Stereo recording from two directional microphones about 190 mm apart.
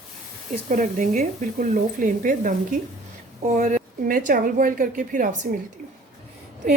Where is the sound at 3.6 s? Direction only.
40° right (ahead or behind).